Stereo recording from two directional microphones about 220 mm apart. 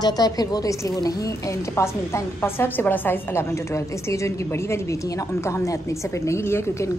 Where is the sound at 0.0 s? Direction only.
15° left (ahead or behind).